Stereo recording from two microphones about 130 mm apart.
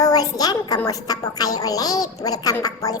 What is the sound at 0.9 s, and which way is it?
A woman's voice, 30° left (ahead or behind).